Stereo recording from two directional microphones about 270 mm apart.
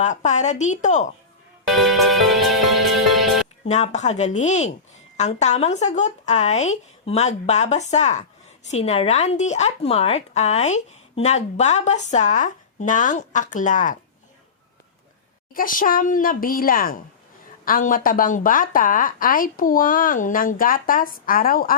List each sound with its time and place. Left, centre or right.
0.0 s a woman's voice: left
1.6 s music: centre
3.7 s a woman's voice: left
15.5 s speech: left